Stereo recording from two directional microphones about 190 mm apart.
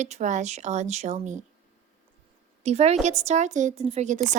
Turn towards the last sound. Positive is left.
turn(degrees=-35)  # may be behind; listen again after turning